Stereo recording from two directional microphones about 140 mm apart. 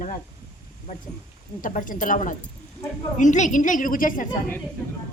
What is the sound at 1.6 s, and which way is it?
A woman's voice, 70° left (ahead or behind).